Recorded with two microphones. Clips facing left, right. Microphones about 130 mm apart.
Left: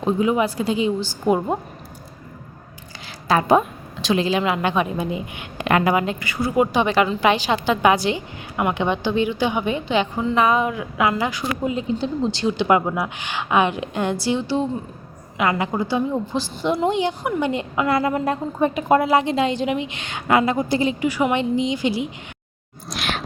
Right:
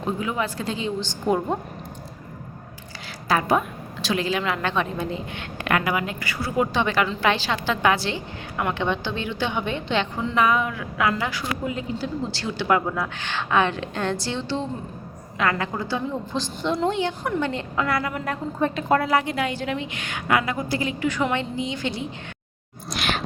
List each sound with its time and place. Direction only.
0.0 s a woman's voice: 20° left (ahead or behind)
3.2 s a woman's voice: 25° left (ahead or behind)
5.6 s a woman's voice: 25° left (ahead or behind); by 10.2 s 10° left (ahead or behind)
10.3 s a woman's voice: 25° left (ahead or behind)
18.6 s a woman's voice: 15° left (ahead or behind)
22.9 s a sound: centre (ahead or behind)